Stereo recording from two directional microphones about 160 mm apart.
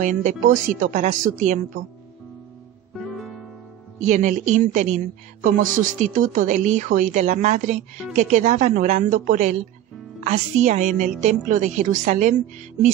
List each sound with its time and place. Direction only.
0.0 s a woman's voice: 50° right (ahead or behind)
3.0 s music: centre (ahead or behind)
4.0 s a woman's voice: 50° right (ahead or behind)